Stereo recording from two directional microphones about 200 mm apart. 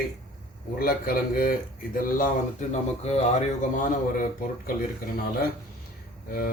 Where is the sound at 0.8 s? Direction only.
45° left (ahead or behind).